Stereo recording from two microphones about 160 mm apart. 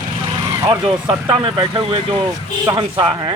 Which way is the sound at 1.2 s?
30° right (ahead or behind).